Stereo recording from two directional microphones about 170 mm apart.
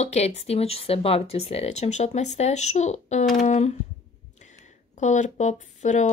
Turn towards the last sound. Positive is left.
turn(degrees=45)  # may be behind; listen again after turning